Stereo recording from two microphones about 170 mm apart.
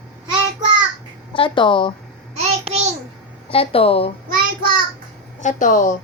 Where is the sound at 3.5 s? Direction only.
35° left (ahead or behind).